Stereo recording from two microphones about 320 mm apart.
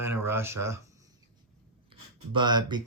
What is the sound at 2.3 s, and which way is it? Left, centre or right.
Speech, centre.